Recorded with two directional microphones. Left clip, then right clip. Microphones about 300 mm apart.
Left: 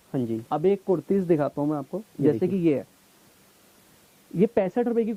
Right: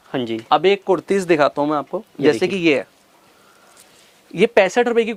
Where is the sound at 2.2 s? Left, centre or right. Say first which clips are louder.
Right 7 dB; centre.